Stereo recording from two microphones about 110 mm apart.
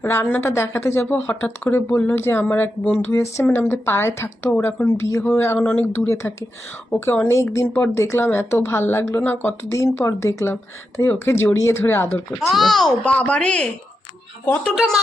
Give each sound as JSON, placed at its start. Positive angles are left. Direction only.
{"t": 0.0, "sound": "speech", "side_deg": 25}
{"t": 12.4, "sound": "a child's voice", "side_deg": 0}
{"t": 13.1, "sound": "speech", "side_deg": 10}